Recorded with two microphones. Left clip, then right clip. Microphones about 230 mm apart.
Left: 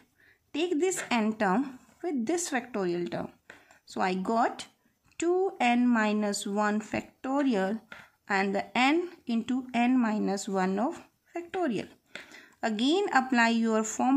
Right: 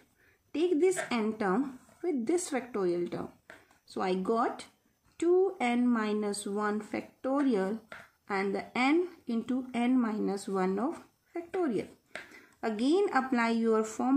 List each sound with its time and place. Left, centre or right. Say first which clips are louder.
0.5 s a woman's voice: right 1 dB; left